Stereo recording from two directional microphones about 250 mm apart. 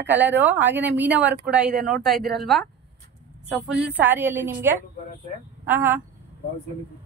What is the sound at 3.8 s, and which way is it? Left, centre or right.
A woman's voice, centre.